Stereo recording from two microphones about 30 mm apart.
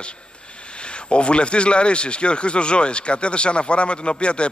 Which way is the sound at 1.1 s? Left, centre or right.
Left.